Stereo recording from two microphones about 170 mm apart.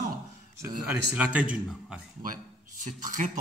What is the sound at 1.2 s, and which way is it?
Speech, 5° right (ahead or behind).